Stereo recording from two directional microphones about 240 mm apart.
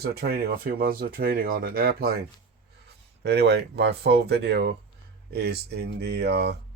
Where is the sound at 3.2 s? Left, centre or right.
Right.